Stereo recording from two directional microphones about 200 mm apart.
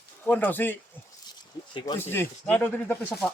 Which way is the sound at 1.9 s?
10° left (ahead or behind).